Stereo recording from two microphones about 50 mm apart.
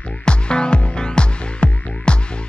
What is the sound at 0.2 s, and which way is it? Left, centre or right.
Music, centre.